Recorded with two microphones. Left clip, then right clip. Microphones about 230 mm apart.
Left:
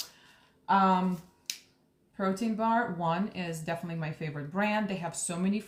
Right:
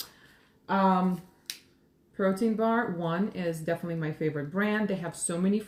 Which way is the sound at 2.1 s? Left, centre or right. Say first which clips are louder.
Right 4 dB; centre.